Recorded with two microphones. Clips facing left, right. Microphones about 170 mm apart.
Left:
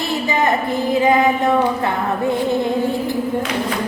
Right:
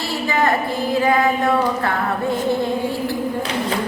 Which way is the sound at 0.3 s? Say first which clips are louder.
Even; 20° left (ahead or behind).